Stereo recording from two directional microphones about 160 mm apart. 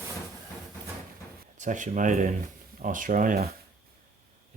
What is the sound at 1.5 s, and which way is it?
Speech, 50° right (ahead or behind).